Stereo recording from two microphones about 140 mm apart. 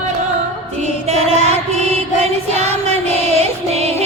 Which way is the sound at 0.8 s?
50° right (ahead or behind).